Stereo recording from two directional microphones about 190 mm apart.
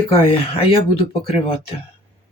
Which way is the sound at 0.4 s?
30° left (ahead or behind).